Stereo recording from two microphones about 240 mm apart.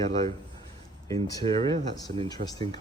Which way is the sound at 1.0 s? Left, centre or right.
Centre.